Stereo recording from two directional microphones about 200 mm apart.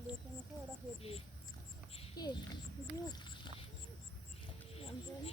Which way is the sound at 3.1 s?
25° left (ahead or behind).